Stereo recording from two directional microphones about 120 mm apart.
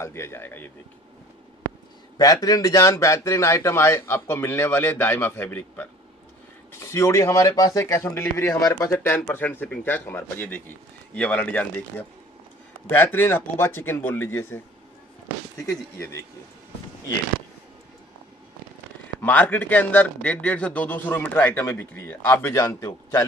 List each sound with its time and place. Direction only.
0.0 s speech: 20° left (ahead or behind)
2.1 s a man's voice: 35° left (ahead or behind); by 11.6 s 10° left (ahead or behind)
12.8 s speech: 15° left (ahead or behind)
19.2 s a man's voice: 15° left (ahead or behind)